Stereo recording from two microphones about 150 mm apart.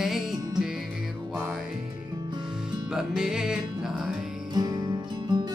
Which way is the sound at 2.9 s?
5° right (ahead or behind).